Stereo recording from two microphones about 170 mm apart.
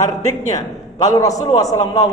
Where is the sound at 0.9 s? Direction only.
20° left (ahead or behind).